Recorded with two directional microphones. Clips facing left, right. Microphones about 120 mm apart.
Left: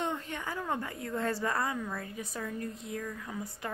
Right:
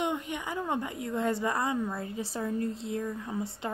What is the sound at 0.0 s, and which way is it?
A woman's voice, 15° right (ahead or behind).